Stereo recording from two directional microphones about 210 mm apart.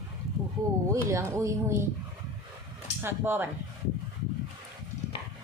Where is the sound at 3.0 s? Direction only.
10° right (ahead or behind).